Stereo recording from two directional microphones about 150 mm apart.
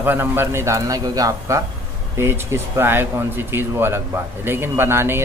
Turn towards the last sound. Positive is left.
turn(degrees=-15)  # may be behind; listen again after turning